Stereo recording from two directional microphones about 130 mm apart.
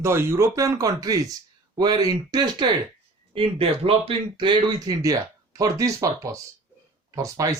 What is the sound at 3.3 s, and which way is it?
Speech, 45° right (ahead or behind).